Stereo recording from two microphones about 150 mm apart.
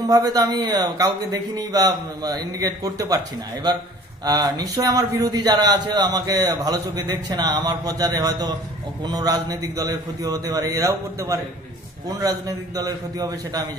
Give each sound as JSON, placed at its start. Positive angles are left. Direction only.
{"t": 0.1, "sound": "a man's voice", "side_deg": -25}
{"t": 4.2, "sound": "a man's voice", "side_deg": -25}